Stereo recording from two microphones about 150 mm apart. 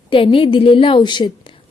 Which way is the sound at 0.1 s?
35° left (ahead or behind).